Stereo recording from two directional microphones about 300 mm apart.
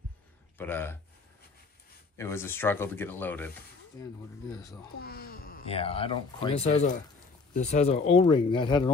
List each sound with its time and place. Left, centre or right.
0.6 s speech: centre
2.1 s speech: centre
5.0 s speech: left
5.7 s speech: centre